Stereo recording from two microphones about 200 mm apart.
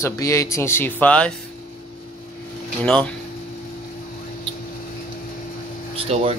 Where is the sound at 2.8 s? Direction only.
5° left (ahead or behind).